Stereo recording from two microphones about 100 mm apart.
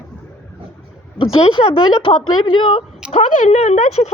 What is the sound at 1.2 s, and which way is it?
Speech, 80° left.